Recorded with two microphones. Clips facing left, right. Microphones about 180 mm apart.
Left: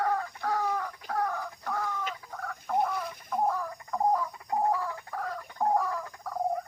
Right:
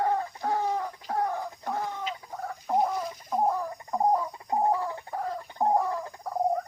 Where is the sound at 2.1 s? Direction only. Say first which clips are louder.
Right 3 dB; 25° right (ahead or behind).